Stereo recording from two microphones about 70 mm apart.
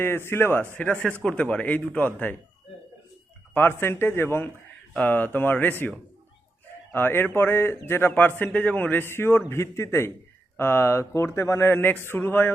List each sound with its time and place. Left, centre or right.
0.0 s speech: left
0.6 s a man's voice: left
3.5 s speech: left
4.9 s a man's voice: left
6.9 s a man's voice: left